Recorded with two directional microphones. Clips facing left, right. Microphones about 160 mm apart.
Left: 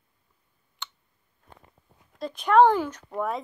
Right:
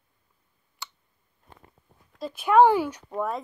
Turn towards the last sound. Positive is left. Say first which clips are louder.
# right 2 dB
turn(degrees=-10)  # may be behind; listen again after turning